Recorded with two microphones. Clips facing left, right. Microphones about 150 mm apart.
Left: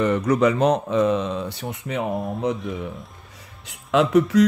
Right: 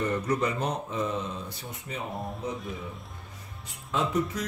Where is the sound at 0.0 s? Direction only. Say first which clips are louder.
Left 9 dB; 90° left.